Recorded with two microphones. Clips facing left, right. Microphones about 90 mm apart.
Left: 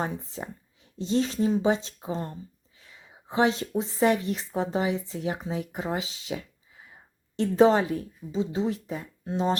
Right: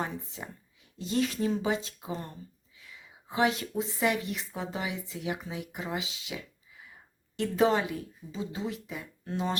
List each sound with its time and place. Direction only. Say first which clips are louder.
0.0 s speech: left 4 dB; 35° left (ahead or behind)
9.2 s speech: left 6 dB; 25° left (ahead or behind)